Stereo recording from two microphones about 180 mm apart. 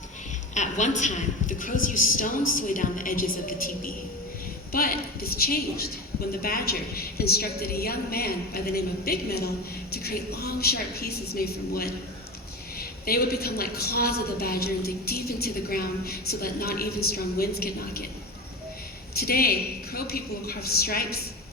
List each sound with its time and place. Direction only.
0.5 s a woman's voice: 40° left (ahead or behind); by 11.9 s 60° left (ahead or behind)
13.1 s a woman's voice: 60° left (ahead or behind)
19.1 s a woman's voice: 60° left (ahead or behind)